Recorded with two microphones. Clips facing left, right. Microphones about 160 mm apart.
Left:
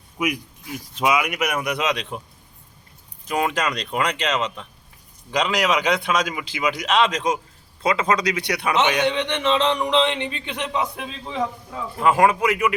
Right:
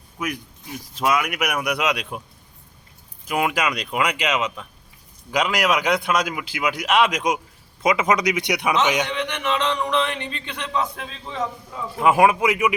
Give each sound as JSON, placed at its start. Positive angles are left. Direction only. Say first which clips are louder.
{"t": 0.2, "sound": "speech", "louder": "left 4 dB", "side_deg": 10}
{"t": 1.6, "sound": "a man's voice", "louder": "even", "side_deg": -10}
{"t": 3.2, "sound": "a man's voice", "louder": "even", "side_deg": -5}
{"t": 9.0, "sound": "speech", "louder": "left 4 dB", "side_deg": 25}
{"t": 11.9, "sound": "a man's voice", "louder": "right 1 dB", "side_deg": -15}